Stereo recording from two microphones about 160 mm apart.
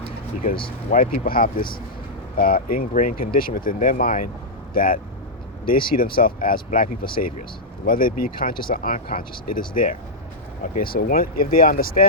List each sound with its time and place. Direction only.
0.9 s speech: 60° left (ahead or behind)